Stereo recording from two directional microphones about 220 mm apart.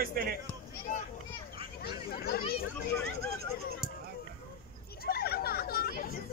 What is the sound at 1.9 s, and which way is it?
Speech, 45° left (ahead or behind).